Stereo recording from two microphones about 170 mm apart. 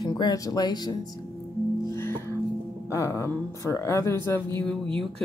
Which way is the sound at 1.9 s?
15° left (ahead or behind).